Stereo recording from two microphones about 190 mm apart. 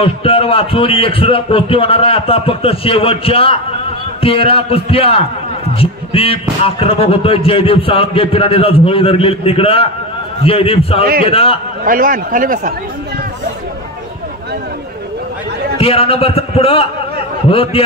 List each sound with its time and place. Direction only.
0.0 s a man's voice: 30° left (ahead or behind)
11.8 s a man's voice: 45° right (ahead or behind)
15.8 s a man's voice: 30° left (ahead or behind)